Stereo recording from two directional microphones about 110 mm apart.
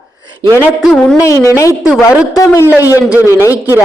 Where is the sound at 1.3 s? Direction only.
30° left (ahead or behind).